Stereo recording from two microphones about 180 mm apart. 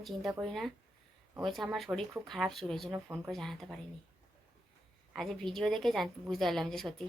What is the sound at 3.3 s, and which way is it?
Speech, centre (ahead or behind).